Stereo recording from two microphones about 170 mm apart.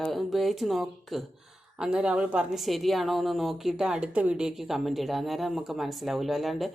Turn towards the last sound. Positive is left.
turn(degrees=0)  # may be behind; listen again after turning